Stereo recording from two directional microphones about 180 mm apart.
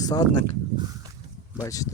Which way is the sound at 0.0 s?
20° left (ahead or behind).